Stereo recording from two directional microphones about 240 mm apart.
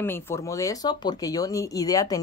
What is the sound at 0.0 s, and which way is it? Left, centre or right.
A woman's voice, centre.